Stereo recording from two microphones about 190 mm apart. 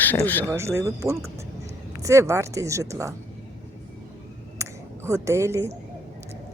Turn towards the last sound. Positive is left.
turn(degrees=-15)  # may be behind; listen again after turning